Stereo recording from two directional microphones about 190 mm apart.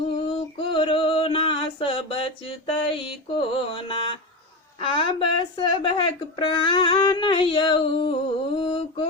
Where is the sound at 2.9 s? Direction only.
25° left (ahead or behind).